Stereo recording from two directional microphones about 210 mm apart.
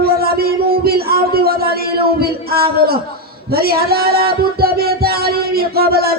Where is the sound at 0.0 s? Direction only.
45° right (ahead or behind).